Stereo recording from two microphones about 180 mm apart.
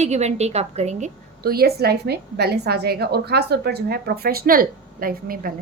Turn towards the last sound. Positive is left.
turn(degrees=-55)  # may be behind; listen again after turning